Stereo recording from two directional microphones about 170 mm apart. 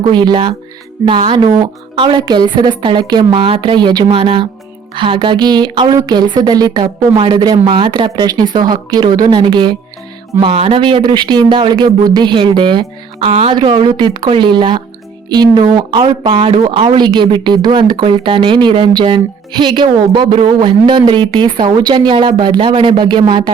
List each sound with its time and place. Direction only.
0.1 s a woman's voice: 25° right (ahead or behind)